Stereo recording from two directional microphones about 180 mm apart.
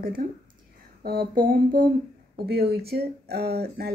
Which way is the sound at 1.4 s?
50° right (ahead or behind).